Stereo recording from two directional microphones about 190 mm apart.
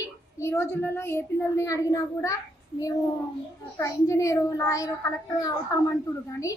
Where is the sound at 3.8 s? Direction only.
15° left (ahead or behind).